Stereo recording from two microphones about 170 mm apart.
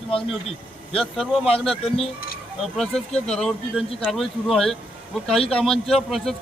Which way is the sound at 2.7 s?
5° left (ahead or behind).